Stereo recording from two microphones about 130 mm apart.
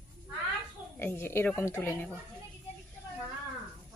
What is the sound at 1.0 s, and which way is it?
Speech, 15° left (ahead or behind).